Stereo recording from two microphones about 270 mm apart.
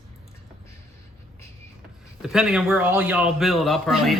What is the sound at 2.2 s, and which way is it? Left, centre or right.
A man's voice, centre.